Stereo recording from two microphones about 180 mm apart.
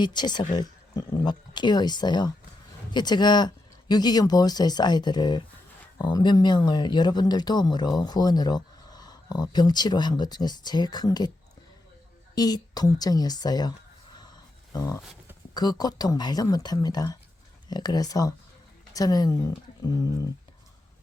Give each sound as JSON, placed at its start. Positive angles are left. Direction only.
{"t": 0.0, "sound": "speech", "side_deg": 25}
{"t": 12.3, "sound": "a sound", "side_deg": 20}
{"t": 15.5, "sound": "speech", "side_deg": 20}